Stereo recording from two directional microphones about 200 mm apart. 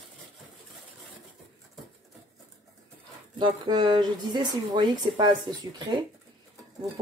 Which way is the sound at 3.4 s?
25° right (ahead or behind).